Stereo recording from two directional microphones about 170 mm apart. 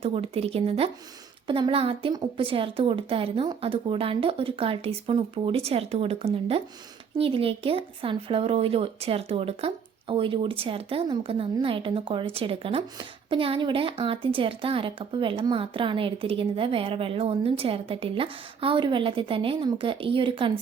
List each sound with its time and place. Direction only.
0.0 s speech: 35° right (ahead or behind)